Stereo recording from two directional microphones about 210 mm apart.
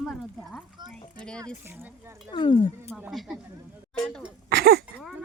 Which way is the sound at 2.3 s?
25° left (ahead or behind).